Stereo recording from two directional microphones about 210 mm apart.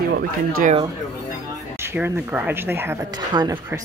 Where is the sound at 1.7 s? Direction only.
10° right (ahead or behind).